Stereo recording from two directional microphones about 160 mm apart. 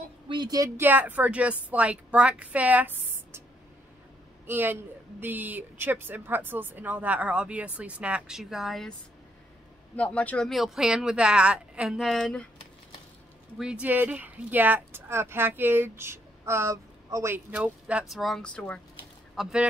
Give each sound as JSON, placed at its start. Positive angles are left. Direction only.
{"t": 0.3, "sound": "speech", "side_deg": -25}
{"t": 0.8, "sound": "speech", "side_deg": -10}
{"t": 4.5, "sound": "speech", "side_deg": -15}
{"t": 9.9, "sound": "speech", "side_deg": 10}
{"t": 13.6, "sound": "speech", "side_deg": -5}
{"t": 19.3, "sound": "speech", "side_deg": -5}